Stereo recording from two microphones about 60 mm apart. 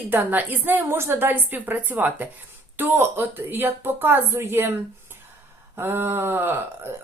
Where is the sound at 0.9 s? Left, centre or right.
Right.